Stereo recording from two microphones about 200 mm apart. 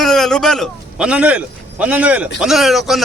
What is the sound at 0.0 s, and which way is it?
A man's voice, centre (ahead or behind).